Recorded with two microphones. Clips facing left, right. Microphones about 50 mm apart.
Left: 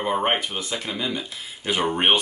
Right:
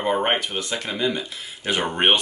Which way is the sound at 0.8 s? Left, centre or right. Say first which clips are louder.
Right 5 dB; centre.